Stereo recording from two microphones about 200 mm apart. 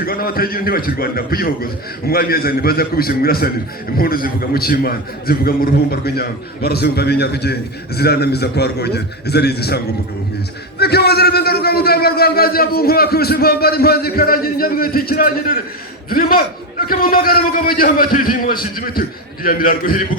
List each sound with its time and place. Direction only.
0.0 s a man's voice: 50° left (ahead or behind)